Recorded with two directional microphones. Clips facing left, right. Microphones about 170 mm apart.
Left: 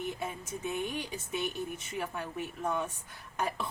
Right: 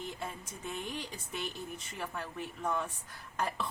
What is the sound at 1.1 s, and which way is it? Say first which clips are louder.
A woman's voice: left 5 dB; 20° left (ahead or behind).